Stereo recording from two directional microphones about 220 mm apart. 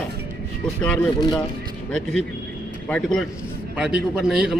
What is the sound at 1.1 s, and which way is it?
Speech, 20° left (ahead or behind).